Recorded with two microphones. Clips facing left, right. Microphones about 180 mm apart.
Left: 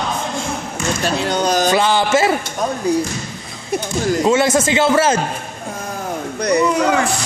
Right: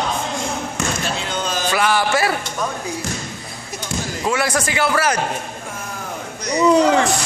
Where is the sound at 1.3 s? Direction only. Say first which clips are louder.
Left 10 dB; 40° left (ahead or behind).